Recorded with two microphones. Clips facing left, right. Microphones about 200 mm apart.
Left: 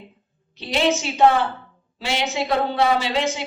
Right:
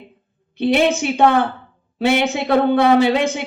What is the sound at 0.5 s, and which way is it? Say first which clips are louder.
Speech: right 5 dB; 55° right (ahead or behind).